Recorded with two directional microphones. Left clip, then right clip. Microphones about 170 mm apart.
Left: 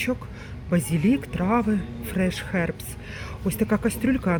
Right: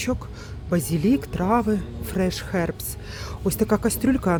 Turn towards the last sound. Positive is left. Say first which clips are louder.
# right 2 dB
turn(degrees=-25)  # may be behind; listen again after turning